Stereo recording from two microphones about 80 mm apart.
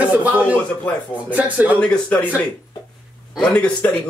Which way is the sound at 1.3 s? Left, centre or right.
Centre.